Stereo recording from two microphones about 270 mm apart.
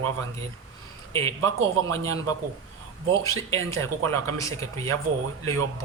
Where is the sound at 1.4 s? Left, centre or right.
Right.